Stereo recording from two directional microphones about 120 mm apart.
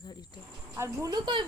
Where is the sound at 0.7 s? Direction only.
25° right (ahead or behind).